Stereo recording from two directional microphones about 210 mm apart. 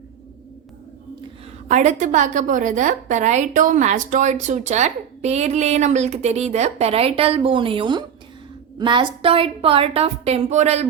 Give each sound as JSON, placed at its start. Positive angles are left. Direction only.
{"t": 1.6, "sound": "a woman's voice", "side_deg": -35}